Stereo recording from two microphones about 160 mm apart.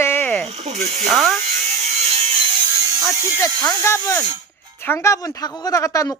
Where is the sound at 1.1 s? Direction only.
Centre (ahead or behind).